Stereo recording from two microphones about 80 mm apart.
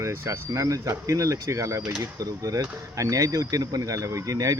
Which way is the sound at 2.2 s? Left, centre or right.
Right.